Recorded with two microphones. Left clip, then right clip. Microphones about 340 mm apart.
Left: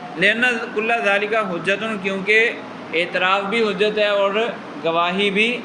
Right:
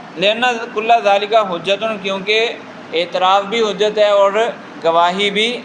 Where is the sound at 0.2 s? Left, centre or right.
Centre.